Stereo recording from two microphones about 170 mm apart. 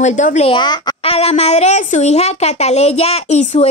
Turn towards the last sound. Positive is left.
turn(degrees=40)  # may be behind; listen again after turning